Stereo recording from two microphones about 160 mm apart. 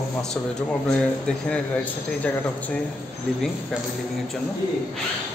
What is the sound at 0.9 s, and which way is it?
Speech, 5° left (ahead or behind).